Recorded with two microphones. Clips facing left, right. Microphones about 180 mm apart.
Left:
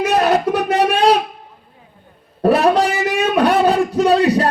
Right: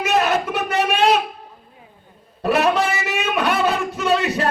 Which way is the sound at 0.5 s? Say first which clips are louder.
Left 5 dB; 35° left (ahead or behind).